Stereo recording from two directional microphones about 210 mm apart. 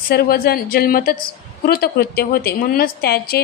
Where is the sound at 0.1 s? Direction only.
50° left (ahead or behind).